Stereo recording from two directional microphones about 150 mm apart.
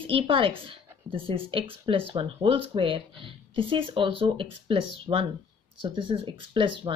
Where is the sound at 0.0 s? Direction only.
35° right (ahead or behind).